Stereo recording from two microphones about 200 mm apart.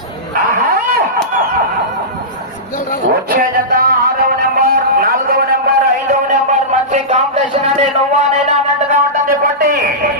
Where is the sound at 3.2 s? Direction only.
45° right (ahead or behind).